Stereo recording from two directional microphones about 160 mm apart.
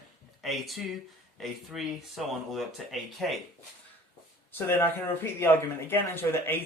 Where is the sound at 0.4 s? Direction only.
Centre (ahead or behind).